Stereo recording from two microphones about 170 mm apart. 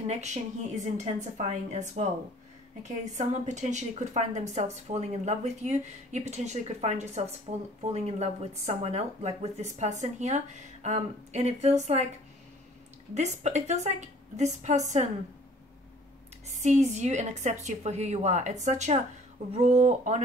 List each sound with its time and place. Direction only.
0.1 s a woman's voice: 40° right (ahead or behind)
13.1 s a woman's voice: 40° right (ahead or behind)
16.5 s a woman's voice: 45° right (ahead or behind)